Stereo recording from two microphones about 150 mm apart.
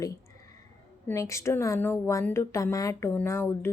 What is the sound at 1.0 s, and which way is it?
A woman's voice, 20° left (ahead or behind).